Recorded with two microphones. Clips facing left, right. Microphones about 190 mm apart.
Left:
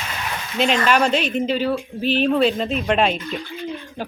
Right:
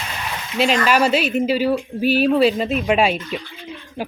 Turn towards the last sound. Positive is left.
turn(degrees=-10)  # may be behind; listen again after turning